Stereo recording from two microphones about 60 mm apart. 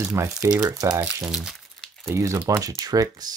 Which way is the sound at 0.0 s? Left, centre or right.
Right.